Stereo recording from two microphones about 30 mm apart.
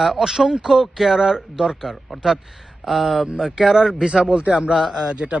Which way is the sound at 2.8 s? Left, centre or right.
Centre.